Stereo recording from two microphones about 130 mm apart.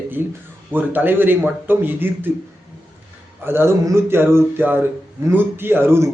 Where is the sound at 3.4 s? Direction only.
20° right (ahead or behind).